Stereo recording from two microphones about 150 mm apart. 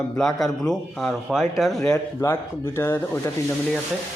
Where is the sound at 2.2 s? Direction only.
15° left (ahead or behind).